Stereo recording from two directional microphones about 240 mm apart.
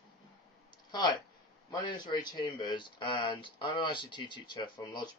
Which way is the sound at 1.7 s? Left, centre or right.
Centre.